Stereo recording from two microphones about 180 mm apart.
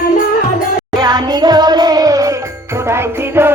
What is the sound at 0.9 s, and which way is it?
Music, 25° right (ahead or behind).